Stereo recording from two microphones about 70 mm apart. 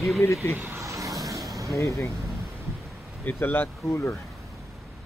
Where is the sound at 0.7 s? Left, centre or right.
Right.